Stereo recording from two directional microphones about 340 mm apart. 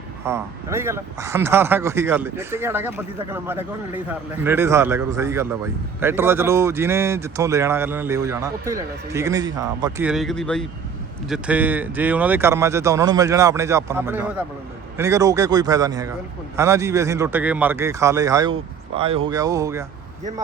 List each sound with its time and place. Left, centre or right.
0.3 s speech: centre